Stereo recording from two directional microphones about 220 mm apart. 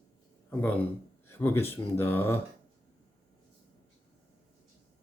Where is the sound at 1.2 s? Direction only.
10° left (ahead or behind).